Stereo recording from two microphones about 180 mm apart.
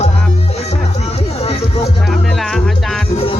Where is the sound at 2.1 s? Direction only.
Centre (ahead or behind).